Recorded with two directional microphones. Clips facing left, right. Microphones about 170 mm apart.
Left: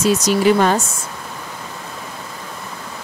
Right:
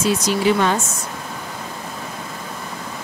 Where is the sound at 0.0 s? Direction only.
40° left (ahead or behind).